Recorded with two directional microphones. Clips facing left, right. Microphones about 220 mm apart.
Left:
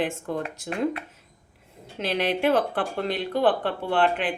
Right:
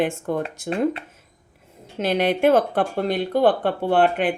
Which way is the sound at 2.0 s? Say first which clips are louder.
Right 5 dB; 50° right (ahead or behind).